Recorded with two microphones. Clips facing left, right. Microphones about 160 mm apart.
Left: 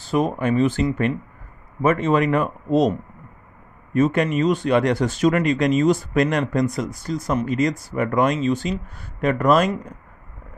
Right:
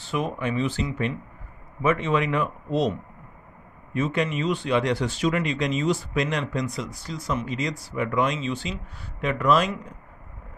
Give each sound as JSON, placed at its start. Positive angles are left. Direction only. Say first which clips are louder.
{"t": 0.0, "sound": "speech", "louder": "left 6 dB", "side_deg": 40}